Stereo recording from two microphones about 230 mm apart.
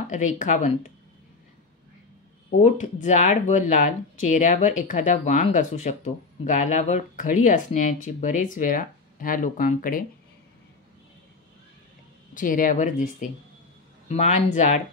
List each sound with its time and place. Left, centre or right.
0.1 s speech: left
2.6 s speech: left
12.4 s speech: left